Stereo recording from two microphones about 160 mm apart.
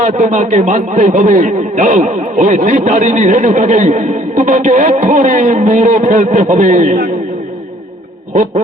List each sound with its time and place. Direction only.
0.0 s speech: 50° right (ahead or behind)